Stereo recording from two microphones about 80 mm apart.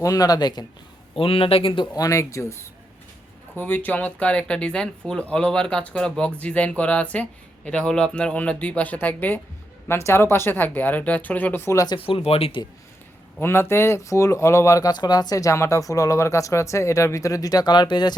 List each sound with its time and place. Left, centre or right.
0.0 s speech: left
1.6 s speech: left
2.0 s speech: left
3.6 s speech: left
12.1 s speech: left
12.6 s speech: left
13.4 s speech: left
14.9 s speech: left